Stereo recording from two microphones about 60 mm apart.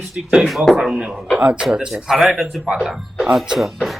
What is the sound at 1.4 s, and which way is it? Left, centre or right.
Speech, centre.